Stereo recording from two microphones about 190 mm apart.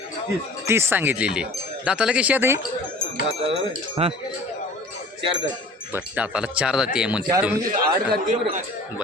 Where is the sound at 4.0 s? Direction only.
30° right (ahead or behind).